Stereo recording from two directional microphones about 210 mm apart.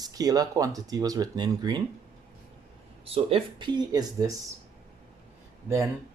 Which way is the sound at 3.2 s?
25° right (ahead or behind).